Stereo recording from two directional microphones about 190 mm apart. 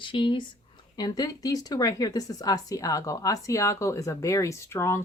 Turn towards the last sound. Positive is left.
turn(degrees=15)  # may be behind; listen again after turning